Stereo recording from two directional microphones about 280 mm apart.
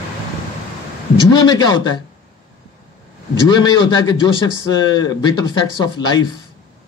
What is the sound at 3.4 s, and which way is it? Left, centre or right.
Speech, centre.